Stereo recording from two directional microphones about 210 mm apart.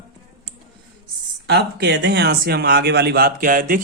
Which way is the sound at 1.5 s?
55° right (ahead or behind).